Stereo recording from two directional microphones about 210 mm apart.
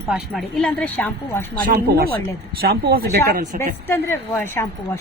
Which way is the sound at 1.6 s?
45° right (ahead or behind).